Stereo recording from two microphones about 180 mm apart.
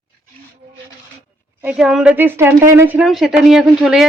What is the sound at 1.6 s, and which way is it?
A woman's voice, 5° right (ahead or behind).